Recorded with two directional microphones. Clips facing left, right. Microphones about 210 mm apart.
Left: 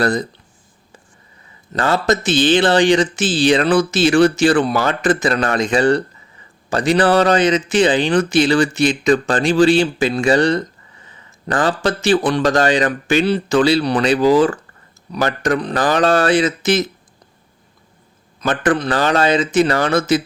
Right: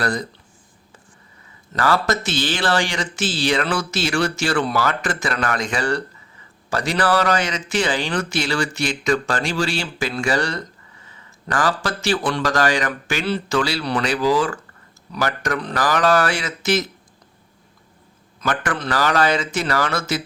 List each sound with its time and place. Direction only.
0.0 s a man's voice: 25° left (ahead or behind)
1.7 s a man's voice: 20° left (ahead or behind)
18.3 s a man's voice: 20° left (ahead or behind)